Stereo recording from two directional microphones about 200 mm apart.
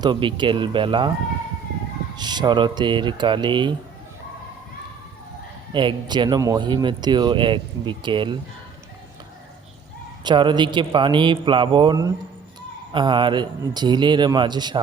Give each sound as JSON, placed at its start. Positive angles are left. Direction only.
{"t": 0.0, "sound": "speech", "side_deg": -25}
{"t": 2.1, "sound": "speech", "side_deg": -20}
{"t": 5.7, "sound": "speech", "side_deg": -25}
{"t": 10.2, "sound": "speech", "side_deg": -20}